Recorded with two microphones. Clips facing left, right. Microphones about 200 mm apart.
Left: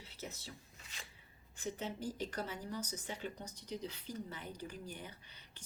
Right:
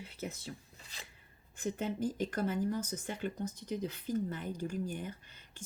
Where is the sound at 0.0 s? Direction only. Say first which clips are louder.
Right 7 dB; 55° right (ahead or behind).